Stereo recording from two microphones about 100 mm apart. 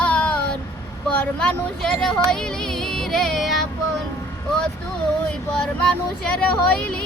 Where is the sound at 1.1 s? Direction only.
10° left (ahead or behind).